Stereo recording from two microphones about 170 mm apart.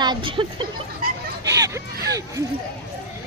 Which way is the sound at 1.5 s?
20° right (ahead or behind).